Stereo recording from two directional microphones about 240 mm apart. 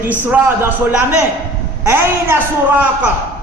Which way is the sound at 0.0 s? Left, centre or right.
Centre.